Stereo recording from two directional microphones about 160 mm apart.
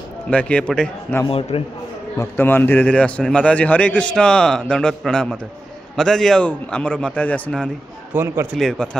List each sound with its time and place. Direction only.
0.3 s a man's voice: 10° left (ahead or behind)
1.2 s a man's voice: 35° left (ahead or behind)
2.1 s a man's voice: 15° left (ahead or behind)
8.1 s a man's voice: 15° right (ahead or behind)
8.5 s a man's voice: 5° left (ahead or behind)